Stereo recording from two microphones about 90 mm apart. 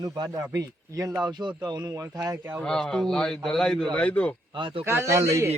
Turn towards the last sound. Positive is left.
turn(degrees=-30)  # may be behind; listen again after turning